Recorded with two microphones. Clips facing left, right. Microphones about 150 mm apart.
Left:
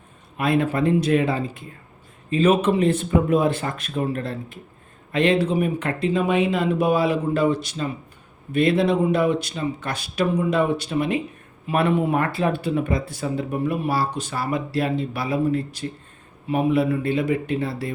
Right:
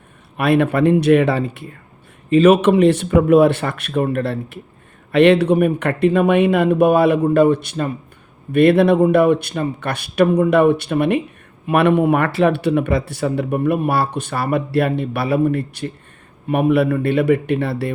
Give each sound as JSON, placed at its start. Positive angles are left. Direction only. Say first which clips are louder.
{"t": 0.3, "sound": "speech", "louder": "right 5 dB", "side_deg": -70}